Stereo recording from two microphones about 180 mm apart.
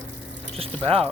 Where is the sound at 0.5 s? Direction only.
35° right (ahead or behind).